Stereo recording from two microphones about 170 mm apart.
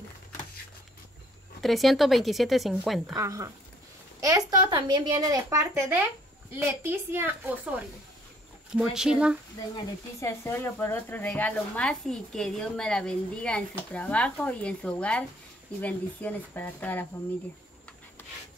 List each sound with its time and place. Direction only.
1.6 s speech: centre (ahead or behind)
3.2 s a woman's voice: 20° right (ahead or behind)
4.2 s a sound: 20° right (ahead or behind)
4.7 s a woman's voice: 25° right (ahead or behind)
8.7 s speech: centre (ahead or behind)
9.8 s speech: 15° left (ahead or behind)